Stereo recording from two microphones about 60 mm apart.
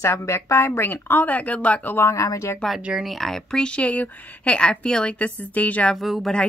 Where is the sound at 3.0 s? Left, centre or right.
Centre; by 4.5 s left.